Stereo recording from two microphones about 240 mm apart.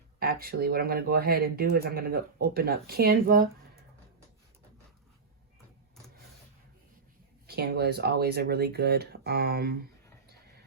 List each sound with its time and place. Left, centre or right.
0.2 s speech: right
7.4 s speech: right